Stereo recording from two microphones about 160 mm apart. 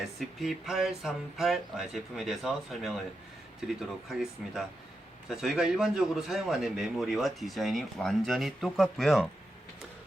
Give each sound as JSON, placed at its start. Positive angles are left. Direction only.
{"t": 0.2, "sound": "speech", "side_deg": 0}